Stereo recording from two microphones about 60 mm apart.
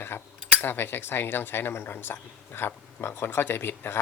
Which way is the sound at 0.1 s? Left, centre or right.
Left.